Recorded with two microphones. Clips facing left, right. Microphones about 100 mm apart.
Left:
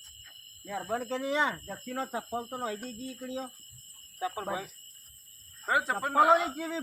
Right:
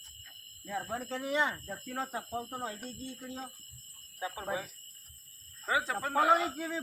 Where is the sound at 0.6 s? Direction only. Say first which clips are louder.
Left 4 dB; 85° left.